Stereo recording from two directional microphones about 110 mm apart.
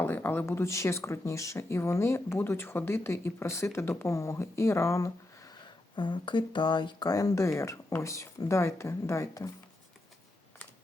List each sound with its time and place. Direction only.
0.0 s speech: 20° left (ahead or behind)
6.0 s speech: 45° left (ahead or behind)
7.1 s speech: 30° left (ahead or behind)